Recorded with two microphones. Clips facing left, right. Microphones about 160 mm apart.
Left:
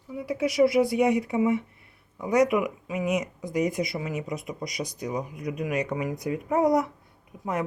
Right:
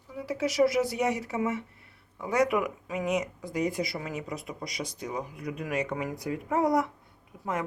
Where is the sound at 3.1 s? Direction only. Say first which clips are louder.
Left 2 dB; 30° right (ahead or behind).